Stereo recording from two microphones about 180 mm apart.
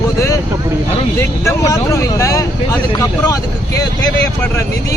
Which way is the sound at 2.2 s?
20° left (ahead or behind).